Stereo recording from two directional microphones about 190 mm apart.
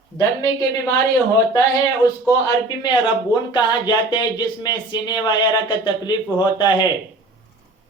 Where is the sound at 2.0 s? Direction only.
20° left (ahead or behind).